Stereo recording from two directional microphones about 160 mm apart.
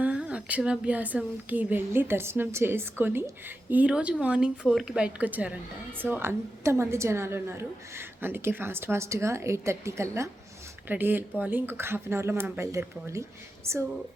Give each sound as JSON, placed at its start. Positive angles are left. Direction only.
{"t": 0.0, "sound": "a woman's voice", "side_deg": -10}